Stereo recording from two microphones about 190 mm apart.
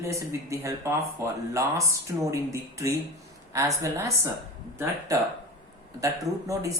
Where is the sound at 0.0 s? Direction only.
15° right (ahead or behind).